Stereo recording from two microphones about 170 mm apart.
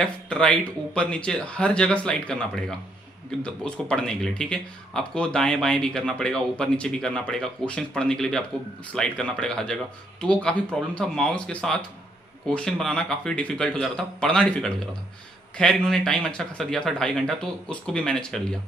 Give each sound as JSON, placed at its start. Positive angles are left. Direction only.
{"t": 0.0, "sound": "speech", "side_deg": 5}